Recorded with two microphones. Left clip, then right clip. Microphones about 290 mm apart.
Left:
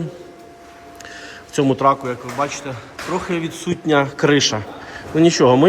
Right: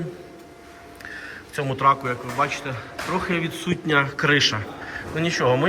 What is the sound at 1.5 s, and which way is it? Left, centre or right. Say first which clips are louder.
A man's voice: left 4 dB; left.